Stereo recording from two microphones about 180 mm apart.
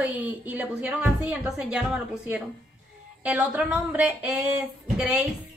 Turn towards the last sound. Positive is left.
turn(degrees=0)  # may be behind; listen again after turning